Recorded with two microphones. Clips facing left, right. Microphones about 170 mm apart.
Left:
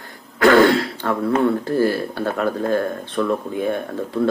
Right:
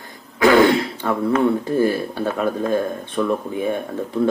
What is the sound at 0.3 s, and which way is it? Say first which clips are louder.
Throat clearing: left 1 dB; 5° right (ahead or behind).